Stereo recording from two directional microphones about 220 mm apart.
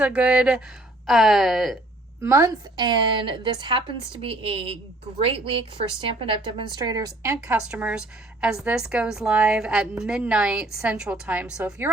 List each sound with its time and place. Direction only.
0.0 s speech: 5° right (ahead or behind)
2.2 s a woman's voice: 15° right (ahead or behind)